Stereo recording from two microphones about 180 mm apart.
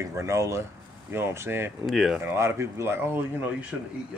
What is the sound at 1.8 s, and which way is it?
Speech, centre (ahead or behind).